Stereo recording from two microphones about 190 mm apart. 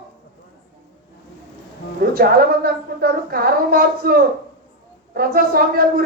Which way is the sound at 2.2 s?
50° right (ahead or behind).